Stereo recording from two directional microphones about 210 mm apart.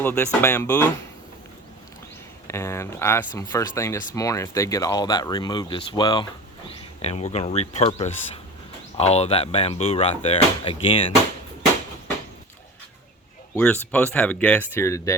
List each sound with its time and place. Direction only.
0.0 s speech: 10° left (ahead or behind)
2.5 s speech: 10° left (ahead or behind)
13.6 s speech: 5° left (ahead or behind)